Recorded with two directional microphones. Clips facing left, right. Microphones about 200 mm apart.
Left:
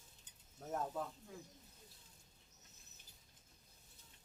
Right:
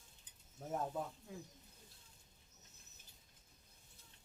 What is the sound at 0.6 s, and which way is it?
Speech, 5° right (ahead or behind).